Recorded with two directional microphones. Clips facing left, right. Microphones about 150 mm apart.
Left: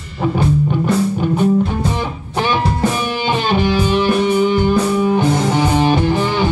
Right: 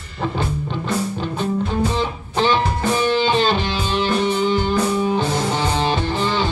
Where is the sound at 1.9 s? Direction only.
15° left (ahead or behind).